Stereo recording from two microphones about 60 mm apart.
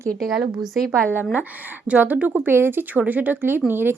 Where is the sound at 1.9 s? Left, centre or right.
Right.